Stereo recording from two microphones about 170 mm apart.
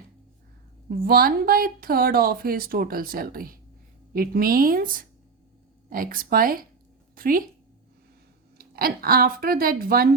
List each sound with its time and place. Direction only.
0.9 s speech: 60° right (ahead or behind)
8.5 s speech: 60° right (ahead or behind)